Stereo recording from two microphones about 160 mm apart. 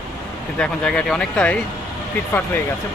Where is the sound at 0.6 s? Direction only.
5° left (ahead or behind).